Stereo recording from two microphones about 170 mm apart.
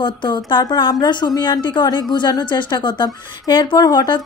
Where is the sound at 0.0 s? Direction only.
25° left (ahead or behind).